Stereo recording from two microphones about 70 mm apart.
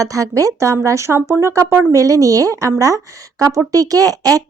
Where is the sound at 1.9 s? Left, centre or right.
Right.